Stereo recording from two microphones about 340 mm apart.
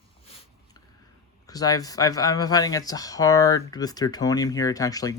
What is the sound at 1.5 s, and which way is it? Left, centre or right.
Speech, centre.